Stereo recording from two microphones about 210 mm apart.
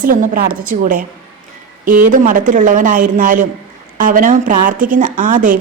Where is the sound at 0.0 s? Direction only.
40° right (ahead or behind).